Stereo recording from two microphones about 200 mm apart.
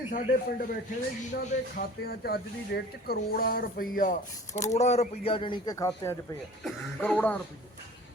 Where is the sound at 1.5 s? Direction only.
50° left (ahead or behind); by 7.3 s 5° left (ahead or behind).